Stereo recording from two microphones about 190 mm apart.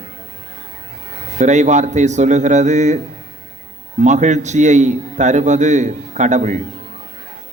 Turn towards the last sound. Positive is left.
turn(degrees=-40)  # may be behind; listen again after turning